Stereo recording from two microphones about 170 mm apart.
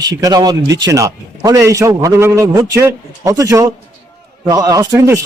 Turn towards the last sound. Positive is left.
turn(degrees=-15)  # may be behind; listen again after turning